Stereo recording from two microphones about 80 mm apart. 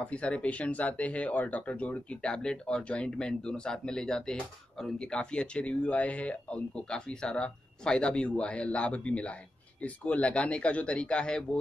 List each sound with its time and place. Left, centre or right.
0.0 s speech: centre